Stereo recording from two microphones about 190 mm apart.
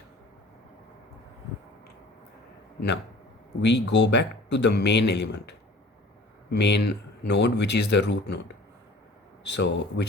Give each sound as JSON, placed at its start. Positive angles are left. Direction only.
{"t": 3.6, "sound": "speech", "side_deg": 65}
{"t": 9.5, "sound": "speech", "side_deg": 65}